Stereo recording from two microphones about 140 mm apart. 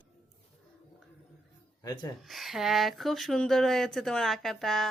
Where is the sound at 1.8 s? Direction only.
25° left (ahead or behind).